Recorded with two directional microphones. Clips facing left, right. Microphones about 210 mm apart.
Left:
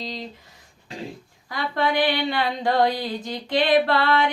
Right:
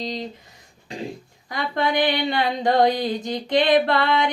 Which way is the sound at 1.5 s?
20° right (ahead or behind).